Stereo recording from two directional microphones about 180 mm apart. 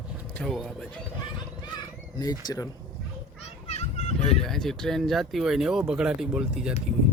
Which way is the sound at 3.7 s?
40° left (ahead or behind).